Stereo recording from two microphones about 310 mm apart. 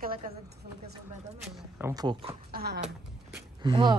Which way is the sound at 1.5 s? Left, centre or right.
Centre.